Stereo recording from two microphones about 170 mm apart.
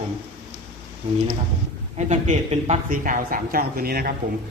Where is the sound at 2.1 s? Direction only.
40° right (ahead or behind); by 4.1 s 60° right (ahead or behind).